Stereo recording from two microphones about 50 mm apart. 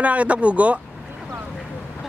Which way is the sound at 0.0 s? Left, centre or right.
Right.